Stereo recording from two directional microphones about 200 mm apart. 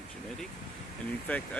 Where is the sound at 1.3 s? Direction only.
10° left (ahead or behind).